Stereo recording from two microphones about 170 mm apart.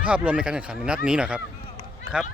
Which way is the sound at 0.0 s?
5° right (ahead or behind).